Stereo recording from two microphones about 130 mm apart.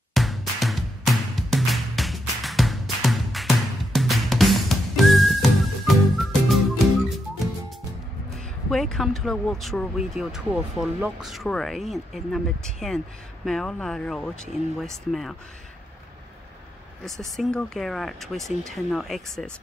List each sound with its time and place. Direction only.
0.1 s music: centre (ahead or behind)
8.6 s speech: 5° left (ahead or behind)
17.0 s speech: centre (ahead or behind)